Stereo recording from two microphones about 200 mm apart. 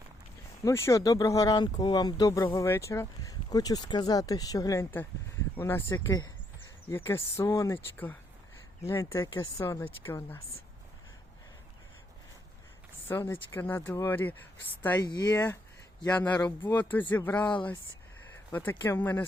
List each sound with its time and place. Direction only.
0.6 s speech: 15° left (ahead or behind)
13.1 s speech: 10° left (ahead or behind)
15.0 s speech: 20° left (ahead or behind)
18.5 s speech: 10° left (ahead or behind)